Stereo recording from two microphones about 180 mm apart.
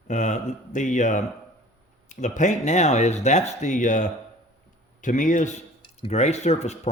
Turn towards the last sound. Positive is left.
turn(degrees=40)  # may be behind; listen again after turning